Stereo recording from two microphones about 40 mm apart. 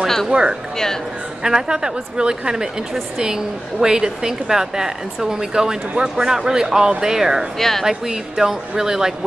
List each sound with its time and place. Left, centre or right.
0.0 s a sound: centre
0.3 s speech: right
7.5 s speech: centre
7.8 s speech: centre